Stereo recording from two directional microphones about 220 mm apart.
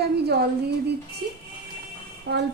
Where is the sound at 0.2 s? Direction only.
45° right (ahead or behind).